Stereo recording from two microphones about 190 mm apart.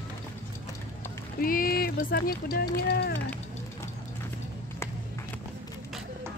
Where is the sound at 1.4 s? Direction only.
50° left (ahead or behind).